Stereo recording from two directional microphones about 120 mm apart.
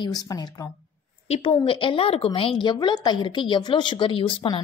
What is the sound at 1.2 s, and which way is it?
Speech, 60° left (ahead or behind).